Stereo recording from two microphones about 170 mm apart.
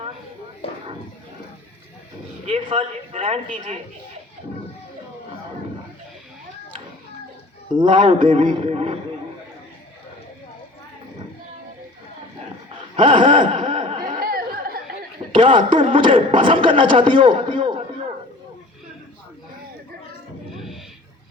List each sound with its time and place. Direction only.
2.5 s speech: 30° right (ahead or behind)
7.7 s speech: 30° right (ahead or behind)
13.0 s a sound: 30° right (ahead or behind)
14.3 s chatter: 60° right (ahead or behind)
15.3 s speech: 30° right (ahead or behind)